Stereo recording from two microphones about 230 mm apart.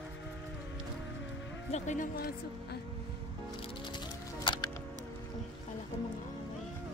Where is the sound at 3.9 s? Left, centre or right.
Centre.